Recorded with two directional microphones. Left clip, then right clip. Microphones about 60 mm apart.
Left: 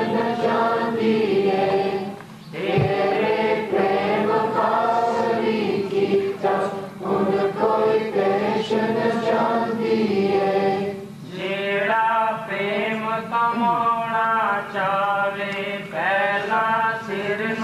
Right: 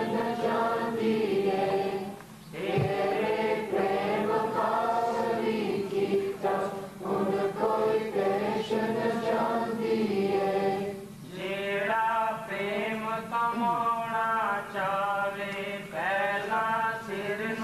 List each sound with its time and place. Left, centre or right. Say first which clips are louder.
0.0 s music: left 7 dB; right
2.6 s chant: left 8 dB; right
11.6 s a sound: left 7 dB; right
16.0 s mantra: left 8 dB; right